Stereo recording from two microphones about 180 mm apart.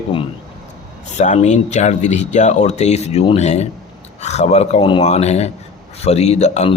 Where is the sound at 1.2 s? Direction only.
40° left (ahead or behind).